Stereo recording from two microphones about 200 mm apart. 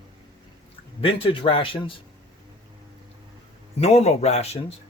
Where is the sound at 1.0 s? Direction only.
25° left (ahead or behind).